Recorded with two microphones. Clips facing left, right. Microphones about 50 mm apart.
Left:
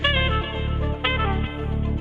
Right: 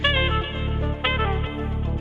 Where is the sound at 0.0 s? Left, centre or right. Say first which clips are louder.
Even; centre.